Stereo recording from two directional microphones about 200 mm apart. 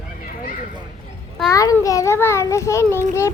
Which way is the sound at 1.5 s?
15° left (ahead or behind).